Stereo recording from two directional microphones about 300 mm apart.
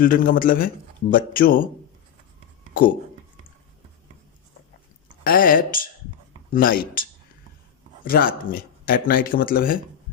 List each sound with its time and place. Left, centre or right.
0.0 s speech: left
5.2 s speech: left